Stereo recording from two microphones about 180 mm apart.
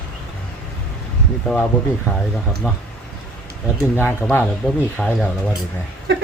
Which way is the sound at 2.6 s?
5° right (ahead or behind).